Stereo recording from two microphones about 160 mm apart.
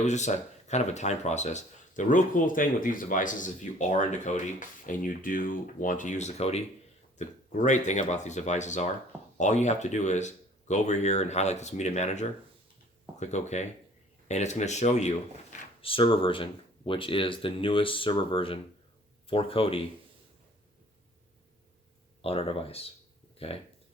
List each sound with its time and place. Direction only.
0.0 s speech: 45° left (ahead or behind)
15.8 s speech: 35° left (ahead or behind)
22.2 s speech: 35° left (ahead or behind)